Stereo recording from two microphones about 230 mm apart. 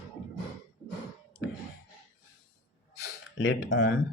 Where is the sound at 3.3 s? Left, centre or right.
Left.